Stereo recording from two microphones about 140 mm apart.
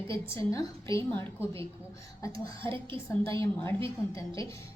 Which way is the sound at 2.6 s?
40° right (ahead or behind).